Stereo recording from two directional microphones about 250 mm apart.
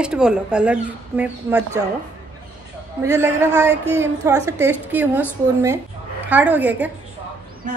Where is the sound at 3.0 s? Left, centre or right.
Centre.